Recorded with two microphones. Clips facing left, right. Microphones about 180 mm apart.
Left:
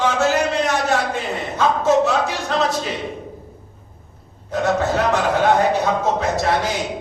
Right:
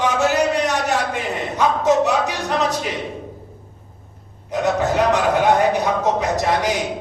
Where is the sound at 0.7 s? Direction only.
15° right (ahead or behind).